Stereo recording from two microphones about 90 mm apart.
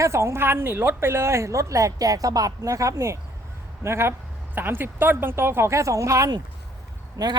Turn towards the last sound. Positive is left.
turn(degrees=-45)  # may be behind; listen again after turning